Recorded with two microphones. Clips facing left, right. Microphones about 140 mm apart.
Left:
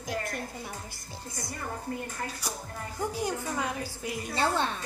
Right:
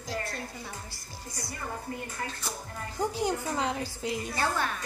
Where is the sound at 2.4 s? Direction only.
10° left (ahead or behind).